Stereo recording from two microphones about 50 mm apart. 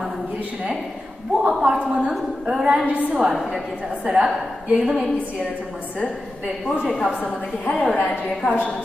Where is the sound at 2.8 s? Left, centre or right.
Right.